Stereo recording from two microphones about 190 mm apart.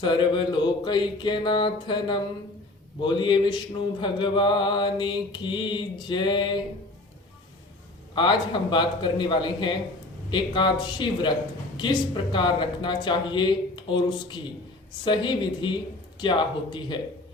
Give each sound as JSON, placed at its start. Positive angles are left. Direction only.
{"t": 0.0, "sound": "mantra", "side_deg": 25}
{"t": 8.1, "sound": "mantra", "side_deg": 25}